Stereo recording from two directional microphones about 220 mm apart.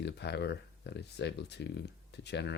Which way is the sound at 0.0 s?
50° left (ahead or behind).